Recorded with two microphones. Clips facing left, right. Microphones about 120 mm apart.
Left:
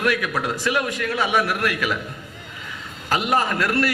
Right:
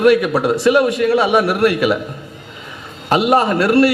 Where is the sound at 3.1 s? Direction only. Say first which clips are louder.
Right 8 dB; 20° right (ahead or behind).